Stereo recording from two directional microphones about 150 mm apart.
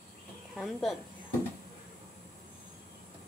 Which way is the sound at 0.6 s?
Centre (ahead or behind).